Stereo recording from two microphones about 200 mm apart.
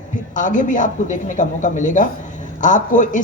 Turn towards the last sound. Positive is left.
turn(degrees=40)  # may be behind; listen again after turning